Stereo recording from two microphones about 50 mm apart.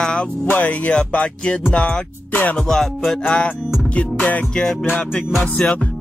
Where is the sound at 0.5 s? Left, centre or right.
Left.